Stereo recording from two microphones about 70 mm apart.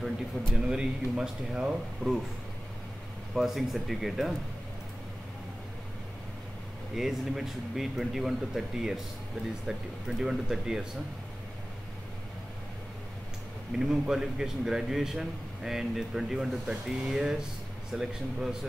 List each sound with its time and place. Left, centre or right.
0.5 s a man's voice: centre
3.3 s speech: centre
7.0 s a man's voice: centre
13.7 s a man's voice: centre